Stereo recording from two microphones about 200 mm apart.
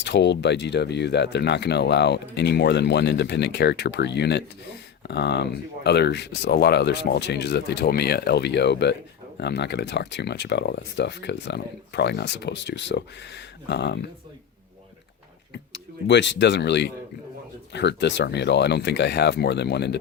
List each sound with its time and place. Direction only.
0.0 s speech: 60° left (ahead or behind)
16.0 s speech: 60° left (ahead or behind)